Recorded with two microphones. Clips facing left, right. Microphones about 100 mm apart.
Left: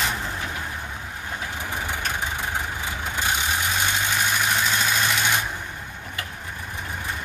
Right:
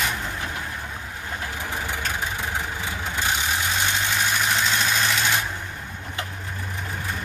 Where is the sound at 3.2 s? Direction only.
10° left (ahead or behind).